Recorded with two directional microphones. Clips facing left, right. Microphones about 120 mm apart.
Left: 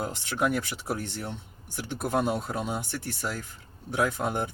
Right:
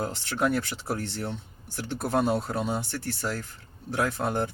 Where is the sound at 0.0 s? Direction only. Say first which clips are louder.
Right 1 dB; 10° left (ahead or behind).